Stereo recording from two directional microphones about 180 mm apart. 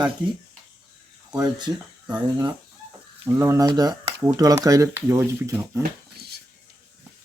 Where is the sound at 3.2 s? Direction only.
15° right (ahead or behind).